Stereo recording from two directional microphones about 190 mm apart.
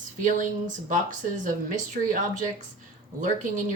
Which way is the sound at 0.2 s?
40° right (ahead or behind).